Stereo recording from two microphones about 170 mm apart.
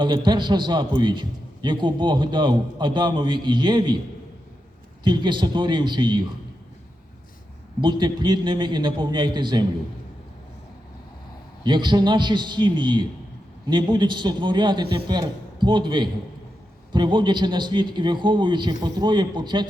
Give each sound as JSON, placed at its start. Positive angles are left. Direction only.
{"t": 0.0, "sound": "a man's voice", "side_deg": -25}
{"t": 5.0, "sound": "a man's voice", "side_deg": -25}
{"t": 7.8, "sound": "a man's voice", "side_deg": -25}
{"t": 11.6, "sound": "a man's voice", "side_deg": -25}